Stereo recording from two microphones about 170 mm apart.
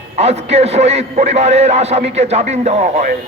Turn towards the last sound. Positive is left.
turn(degrees=-45)  # may be behind; listen again after turning